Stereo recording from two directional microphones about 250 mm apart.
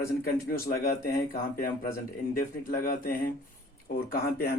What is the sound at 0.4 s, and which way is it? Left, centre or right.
Speech, left.